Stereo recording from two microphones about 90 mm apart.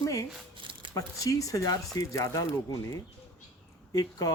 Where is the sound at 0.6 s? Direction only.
70° right (ahead or behind).